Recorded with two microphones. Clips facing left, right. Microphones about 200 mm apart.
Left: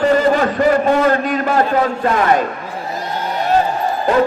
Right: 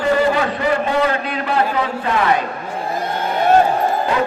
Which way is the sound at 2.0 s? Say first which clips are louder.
Left 1 dB; 45° left (ahead or behind).